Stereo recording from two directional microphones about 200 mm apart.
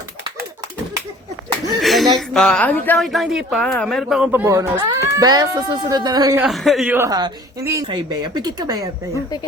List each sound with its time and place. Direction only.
1.8 s a sound: centre (ahead or behind)
2.1 s a woman's voice: centre (ahead or behind); by 6.4 s 20° right (ahead or behind)
6.4 s a woman's voice: centre (ahead or behind); by 8.9 s 20° right (ahead or behind)